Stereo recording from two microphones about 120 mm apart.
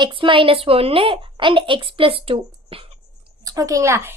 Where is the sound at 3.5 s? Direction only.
30° right (ahead or behind).